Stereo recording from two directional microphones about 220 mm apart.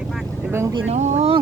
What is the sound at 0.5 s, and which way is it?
Speech, 15° right (ahead or behind).